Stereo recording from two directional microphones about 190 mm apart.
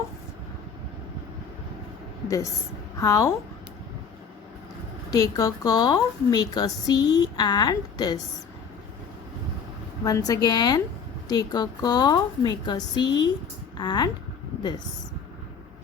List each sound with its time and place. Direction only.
2.2 s a woman's voice: 15° left (ahead or behind)
5.1 s a woman's voice: 20° left (ahead or behind)
10.0 s a woman's voice: 20° left (ahead or behind)